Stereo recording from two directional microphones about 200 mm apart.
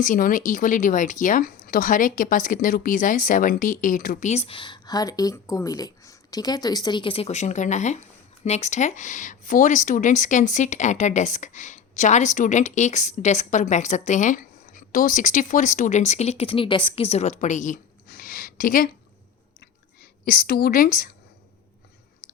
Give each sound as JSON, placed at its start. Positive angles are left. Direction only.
{"t": 0.0, "sound": "a woman's voice", "side_deg": 40}
{"t": 20.0, "sound": "a woman's voice", "side_deg": 45}